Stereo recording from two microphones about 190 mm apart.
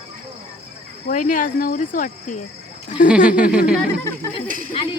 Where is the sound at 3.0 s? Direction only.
5° right (ahead or behind).